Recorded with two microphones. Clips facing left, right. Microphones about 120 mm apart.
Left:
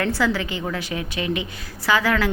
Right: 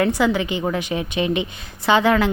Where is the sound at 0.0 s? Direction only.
20° right (ahead or behind).